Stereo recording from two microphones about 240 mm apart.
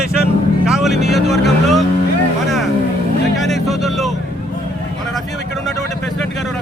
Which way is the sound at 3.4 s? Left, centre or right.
Centre.